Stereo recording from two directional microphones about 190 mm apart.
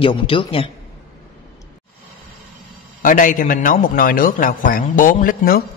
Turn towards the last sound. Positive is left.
turn(degrees=50)  # may be behind; listen again after turning